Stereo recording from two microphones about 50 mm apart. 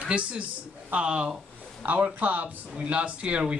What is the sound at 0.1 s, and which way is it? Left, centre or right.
Speech, right.